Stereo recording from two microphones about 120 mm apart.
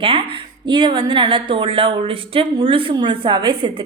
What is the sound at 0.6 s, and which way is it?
A woman's voice, 40° right (ahead or behind).